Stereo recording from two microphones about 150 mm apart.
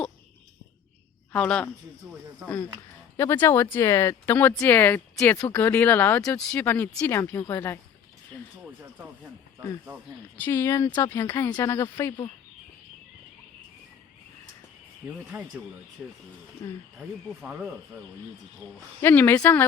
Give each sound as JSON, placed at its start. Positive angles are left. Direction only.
{"t": 1.3, "sound": "speech", "side_deg": 5}
{"t": 3.2, "sound": "speech", "side_deg": 15}
{"t": 8.6, "sound": "speech", "side_deg": -10}
{"t": 10.3, "sound": "speech", "side_deg": 15}
{"t": 16.0, "sound": "speech", "side_deg": 0}
{"t": 16.6, "sound": "speech", "side_deg": 15}
{"t": 17.2, "sound": "speech", "side_deg": -5}
{"t": 19.0, "sound": "speech", "side_deg": 15}